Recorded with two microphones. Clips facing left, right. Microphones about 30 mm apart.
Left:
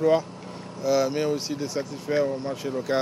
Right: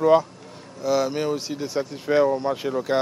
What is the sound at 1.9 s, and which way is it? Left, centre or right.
Speech, right.